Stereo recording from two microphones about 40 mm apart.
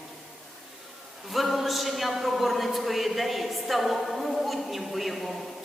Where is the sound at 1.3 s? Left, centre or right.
Centre.